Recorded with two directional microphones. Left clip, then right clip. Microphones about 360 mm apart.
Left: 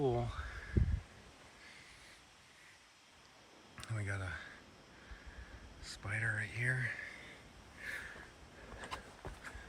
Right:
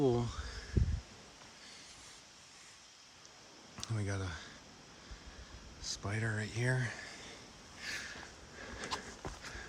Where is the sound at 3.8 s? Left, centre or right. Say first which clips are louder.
Right 2 dB; centre.